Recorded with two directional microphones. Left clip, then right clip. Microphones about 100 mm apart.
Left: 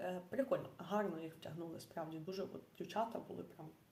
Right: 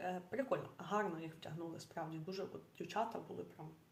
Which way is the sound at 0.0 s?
15° left (ahead or behind).